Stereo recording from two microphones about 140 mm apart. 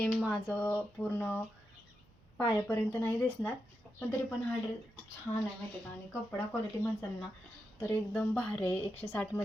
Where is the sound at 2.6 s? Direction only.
20° left (ahead or behind).